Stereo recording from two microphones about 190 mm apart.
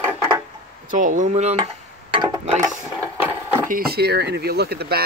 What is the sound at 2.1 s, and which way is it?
Mechanisms, 25° right (ahead or behind).